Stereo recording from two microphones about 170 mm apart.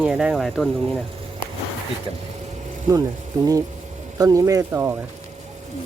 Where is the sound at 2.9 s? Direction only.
20° right (ahead or behind).